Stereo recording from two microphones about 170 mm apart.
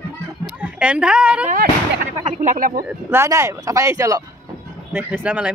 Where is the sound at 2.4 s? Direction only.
50° right (ahead or behind).